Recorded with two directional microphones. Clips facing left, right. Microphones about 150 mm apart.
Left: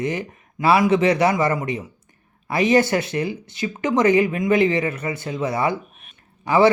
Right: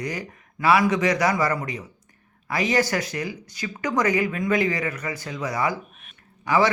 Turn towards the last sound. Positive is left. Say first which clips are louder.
# left 5 dB
turn(degrees=25)  # may be behind; listen again after turning